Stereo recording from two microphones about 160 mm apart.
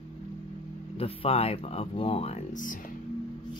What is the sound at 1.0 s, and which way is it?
Speech, 35° left (ahead or behind).